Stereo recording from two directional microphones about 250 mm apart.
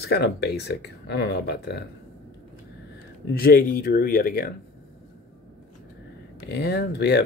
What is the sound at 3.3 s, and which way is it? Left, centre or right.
Speech, left.